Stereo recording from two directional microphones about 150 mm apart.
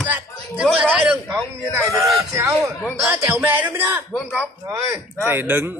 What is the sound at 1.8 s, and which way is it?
A man's voice, 20° right (ahead or behind).